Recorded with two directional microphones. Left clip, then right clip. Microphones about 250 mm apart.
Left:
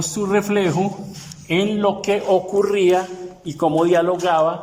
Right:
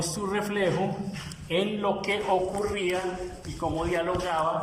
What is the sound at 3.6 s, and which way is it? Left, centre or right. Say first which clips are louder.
Speech: left 12 dB; left.